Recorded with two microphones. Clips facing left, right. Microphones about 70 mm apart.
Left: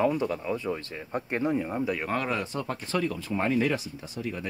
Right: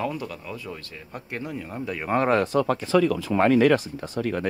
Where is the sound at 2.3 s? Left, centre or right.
Right.